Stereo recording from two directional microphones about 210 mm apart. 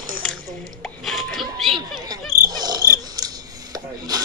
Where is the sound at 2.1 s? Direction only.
20° right (ahead or behind).